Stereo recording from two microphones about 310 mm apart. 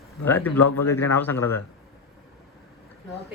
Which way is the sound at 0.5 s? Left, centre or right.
Left.